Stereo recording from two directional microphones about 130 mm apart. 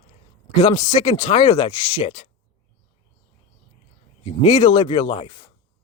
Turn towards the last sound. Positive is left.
turn(degrees=40)  # may be behind; listen again after turning